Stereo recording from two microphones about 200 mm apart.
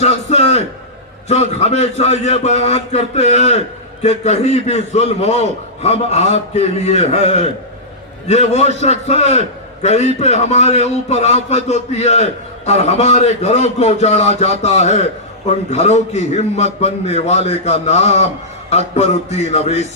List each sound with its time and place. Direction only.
0.0 s a man's voice: 35° left (ahead or behind)
8.3 s a man's voice: 35° left (ahead or behind)